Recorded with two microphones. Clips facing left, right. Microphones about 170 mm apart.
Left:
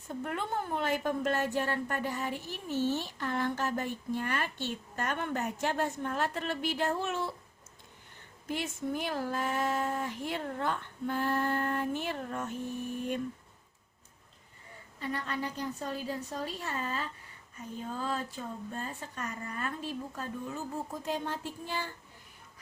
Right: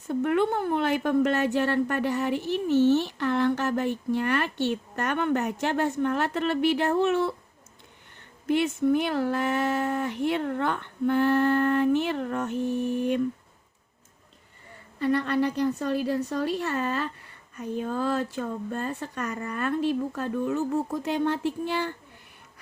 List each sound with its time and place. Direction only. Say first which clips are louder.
0.1 s a woman's voice: right 11 dB; 75° right (ahead or behind)
8.4 s a woman's voice: right 12 dB; 65° right (ahead or behind)
14.9 s a woman's voice: right 12 dB; 70° right (ahead or behind)